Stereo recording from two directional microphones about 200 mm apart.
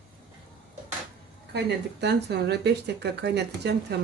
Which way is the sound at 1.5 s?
55° right (ahead or behind).